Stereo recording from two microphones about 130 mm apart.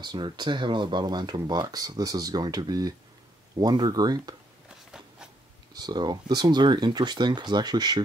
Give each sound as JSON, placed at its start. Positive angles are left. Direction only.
{"t": 0.0, "sound": "speech", "side_deg": -35}
{"t": 5.8, "sound": "speech", "side_deg": -35}